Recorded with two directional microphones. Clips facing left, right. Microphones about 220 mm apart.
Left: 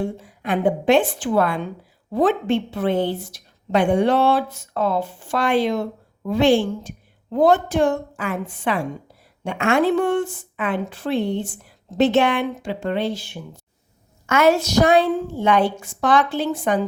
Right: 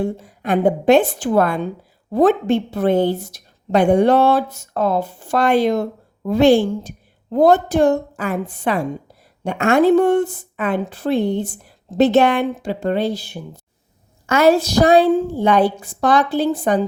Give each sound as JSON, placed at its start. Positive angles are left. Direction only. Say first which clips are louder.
{"t": 0.0, "sound": "a woman's voice", "louder": "right 4 dB", "side_deg": -40}